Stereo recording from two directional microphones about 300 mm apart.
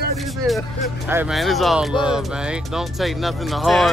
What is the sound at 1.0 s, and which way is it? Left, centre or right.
Speech, centre.